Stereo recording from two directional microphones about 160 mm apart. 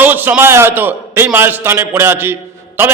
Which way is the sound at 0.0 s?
10° right (ahead or behind).